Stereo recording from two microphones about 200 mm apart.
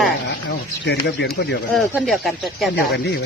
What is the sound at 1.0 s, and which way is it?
Speech, 60° left (ahead or behind).